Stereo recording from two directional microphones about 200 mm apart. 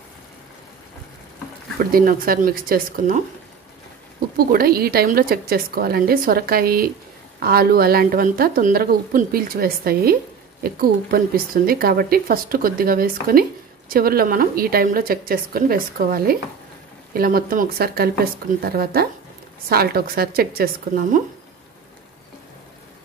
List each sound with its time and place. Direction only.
1.9 s speech: 45° right (ahead or behind)
4.4 s speech: 50° right (ahead or behind)